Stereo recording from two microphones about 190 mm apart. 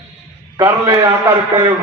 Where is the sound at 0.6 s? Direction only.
20° right (ahead or behind).